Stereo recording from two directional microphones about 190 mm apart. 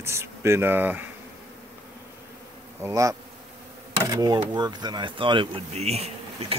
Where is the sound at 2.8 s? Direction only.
15° right (ahead or behind).